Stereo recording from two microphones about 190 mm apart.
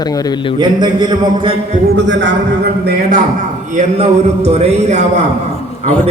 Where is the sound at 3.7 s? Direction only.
35° right (ahead or behind).